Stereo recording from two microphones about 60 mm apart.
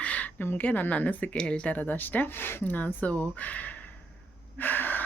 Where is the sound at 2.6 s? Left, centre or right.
Left.